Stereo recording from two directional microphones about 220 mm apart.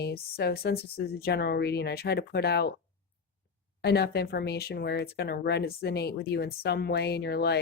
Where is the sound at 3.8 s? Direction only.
45° left (ahead or behind).